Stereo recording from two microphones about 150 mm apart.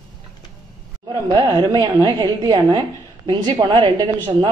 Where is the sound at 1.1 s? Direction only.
25° right (ahead or behind).